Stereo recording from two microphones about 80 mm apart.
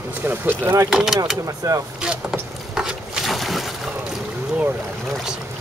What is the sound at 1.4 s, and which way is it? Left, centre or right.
Speech, right.